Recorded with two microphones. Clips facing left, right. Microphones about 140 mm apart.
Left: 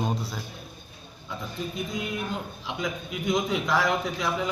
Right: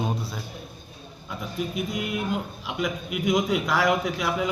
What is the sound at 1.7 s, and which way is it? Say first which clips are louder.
Music: right 1 dB; 70° right (ahead or behind).